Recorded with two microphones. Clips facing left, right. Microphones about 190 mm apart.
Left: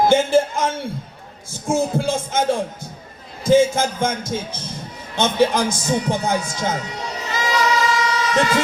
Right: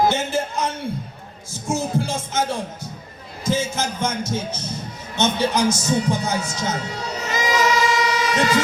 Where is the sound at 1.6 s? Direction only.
50° left (ahead or behind).